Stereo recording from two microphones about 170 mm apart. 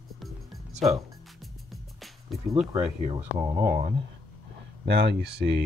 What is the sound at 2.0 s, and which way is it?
Music, centre (ahead or behind).